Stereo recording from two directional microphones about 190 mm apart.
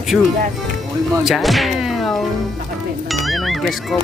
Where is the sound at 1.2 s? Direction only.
Centre (ahead or behind).